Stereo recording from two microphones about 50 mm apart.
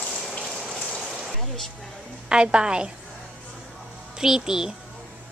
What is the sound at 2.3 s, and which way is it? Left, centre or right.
Speech, centre.